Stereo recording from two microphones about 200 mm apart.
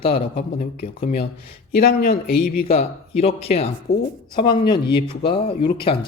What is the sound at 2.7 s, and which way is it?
Speech, 30° left (ahead or behind).